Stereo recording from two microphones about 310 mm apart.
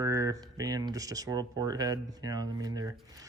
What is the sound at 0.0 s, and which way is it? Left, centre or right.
A man's voice, centre.